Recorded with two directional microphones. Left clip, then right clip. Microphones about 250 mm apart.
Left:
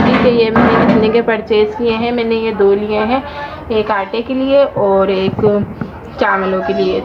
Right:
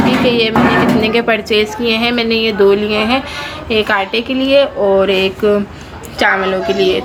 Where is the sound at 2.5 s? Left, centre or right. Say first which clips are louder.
Right 1 dB; right.